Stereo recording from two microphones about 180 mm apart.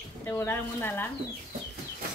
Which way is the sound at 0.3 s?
15° left (ahead or behind).